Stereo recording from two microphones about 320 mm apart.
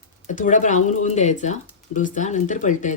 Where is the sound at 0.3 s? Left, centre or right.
Left.